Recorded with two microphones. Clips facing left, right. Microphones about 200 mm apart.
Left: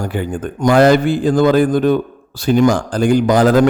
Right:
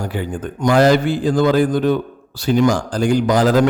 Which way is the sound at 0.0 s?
50° left (ahead or behind).